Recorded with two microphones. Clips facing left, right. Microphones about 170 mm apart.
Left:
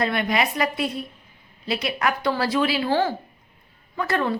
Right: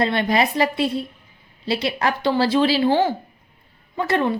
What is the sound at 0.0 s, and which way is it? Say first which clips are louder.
A woman's voice: right 3 dB; 30° right (ahead or behind).